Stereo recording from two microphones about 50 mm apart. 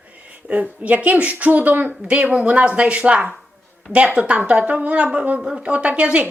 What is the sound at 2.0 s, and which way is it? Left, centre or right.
Speech, right.